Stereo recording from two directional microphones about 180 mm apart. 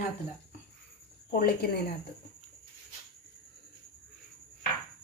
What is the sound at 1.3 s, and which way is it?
Speech, 60° left (ahead or behind).